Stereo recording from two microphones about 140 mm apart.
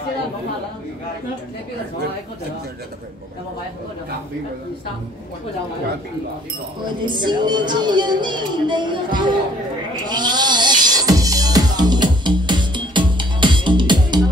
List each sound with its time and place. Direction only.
7.1 s speech: 35° right (ahead or behind)
10.0 s music: 30° right (ahead or behind)